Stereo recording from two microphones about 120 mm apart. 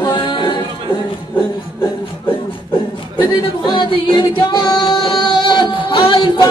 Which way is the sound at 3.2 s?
40° left (ahead or behind).